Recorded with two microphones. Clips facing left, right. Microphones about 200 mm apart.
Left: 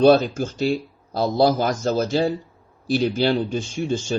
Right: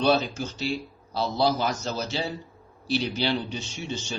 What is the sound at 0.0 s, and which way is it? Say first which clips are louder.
Speech: left 8 dB; 50° left (ahead or behind).